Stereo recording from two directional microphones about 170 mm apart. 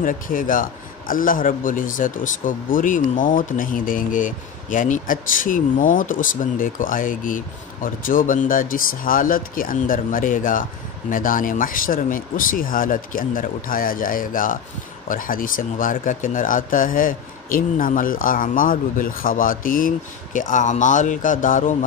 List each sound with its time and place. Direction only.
0.0 s a man's voice: 55° left (ahead or behind)